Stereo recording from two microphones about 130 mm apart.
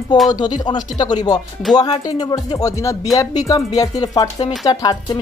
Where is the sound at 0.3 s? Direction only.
35° left (ahead or behind).